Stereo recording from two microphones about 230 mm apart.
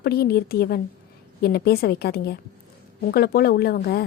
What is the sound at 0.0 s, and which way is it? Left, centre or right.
A woman's voice, left.